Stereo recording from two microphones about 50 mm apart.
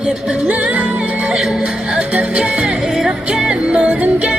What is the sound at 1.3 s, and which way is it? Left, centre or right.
Speech, centre.